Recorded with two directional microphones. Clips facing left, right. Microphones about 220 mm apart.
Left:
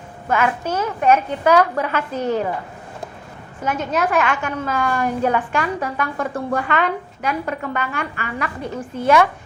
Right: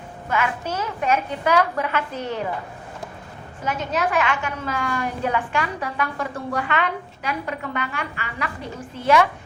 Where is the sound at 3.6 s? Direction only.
50° left (ahead or behind).